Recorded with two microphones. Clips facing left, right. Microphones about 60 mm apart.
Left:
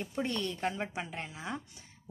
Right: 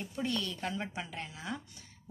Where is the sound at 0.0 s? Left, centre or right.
Left.